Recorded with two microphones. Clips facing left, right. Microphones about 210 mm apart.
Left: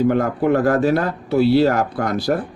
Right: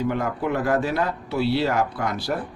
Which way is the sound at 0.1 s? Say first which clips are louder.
Left 7 dB; 50° left (ahead or behind).